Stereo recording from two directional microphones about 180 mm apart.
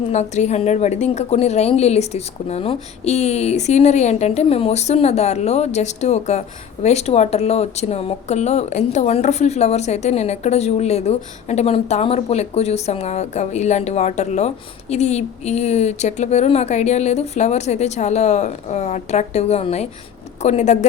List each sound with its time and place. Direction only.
0.1 s speech: 40° left (ahead or behind)